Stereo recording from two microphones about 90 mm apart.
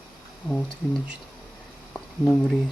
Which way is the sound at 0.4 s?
15° left (ahead or behind).